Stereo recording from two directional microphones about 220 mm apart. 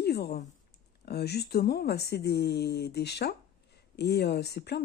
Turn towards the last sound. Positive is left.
turn(degrees=50)  # may be behind; listen again after turning